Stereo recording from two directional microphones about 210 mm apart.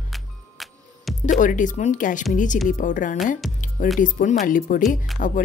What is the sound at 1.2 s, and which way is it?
Speech, 40° left (ahead or behind).